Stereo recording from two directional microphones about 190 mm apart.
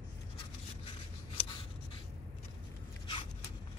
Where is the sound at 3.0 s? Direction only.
30° left (ahead or behind).